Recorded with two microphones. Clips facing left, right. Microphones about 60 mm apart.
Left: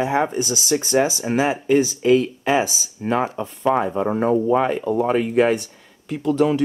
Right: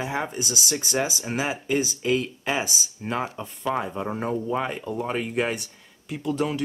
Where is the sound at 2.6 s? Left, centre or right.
Left.